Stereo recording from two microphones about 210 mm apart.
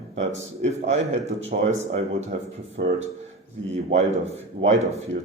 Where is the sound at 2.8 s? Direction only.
45° right (ahead or behind).